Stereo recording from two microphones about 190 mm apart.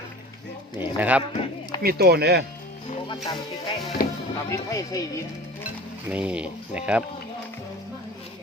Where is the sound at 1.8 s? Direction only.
55° right (ahead or behind).